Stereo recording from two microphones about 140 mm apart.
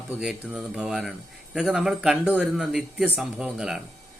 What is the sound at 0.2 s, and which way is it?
A man's voice, 5° right (ahead or behind).